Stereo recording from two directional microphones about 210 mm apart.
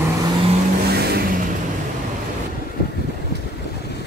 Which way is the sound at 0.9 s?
45° right (ahead or behind).